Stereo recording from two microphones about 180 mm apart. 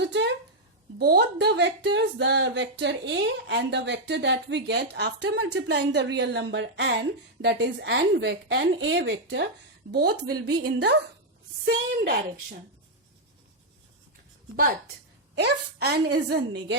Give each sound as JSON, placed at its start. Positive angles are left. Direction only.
{"t": 0.0, "sound": "a sound", "side_deg": -75}
{"t": 0.9, "sound": "speech", "side_deg": -60}
{"t": 9.9, "sound": "a woman's voice", "side_deg": -60}
{"t": 11.6, "sound": "a woman's voice", "side_deg": -60}
{"t": 14.5, "sound": "a woman's voice", "side_deg": -50}
{"t": 15.4, "sound": "a woman's voice", "side_deg": -65}